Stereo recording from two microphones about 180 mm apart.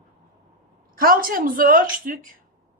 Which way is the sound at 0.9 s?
55° right (ahead or behind).